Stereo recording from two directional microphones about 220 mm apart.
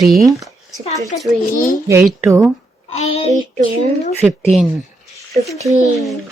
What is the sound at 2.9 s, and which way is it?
Speech, 30° left (ahead or behind).